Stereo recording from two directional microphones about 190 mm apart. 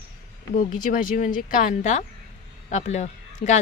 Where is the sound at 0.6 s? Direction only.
45° left (ahead or behind).